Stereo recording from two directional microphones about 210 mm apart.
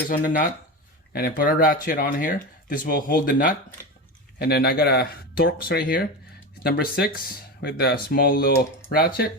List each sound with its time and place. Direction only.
0.1 s speech: 45° left (ahead or behind)